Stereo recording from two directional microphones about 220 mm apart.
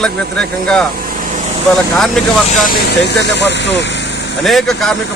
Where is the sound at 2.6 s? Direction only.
45° left (ahead or behind).